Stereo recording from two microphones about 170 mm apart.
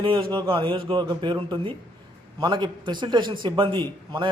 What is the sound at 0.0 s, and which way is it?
A man's voice, 30° right (ahead or behind).